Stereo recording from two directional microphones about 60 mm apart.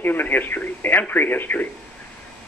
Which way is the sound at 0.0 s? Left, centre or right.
Left.